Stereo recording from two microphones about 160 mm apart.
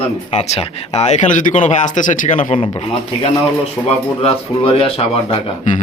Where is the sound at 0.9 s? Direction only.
45° left (ahead or behind).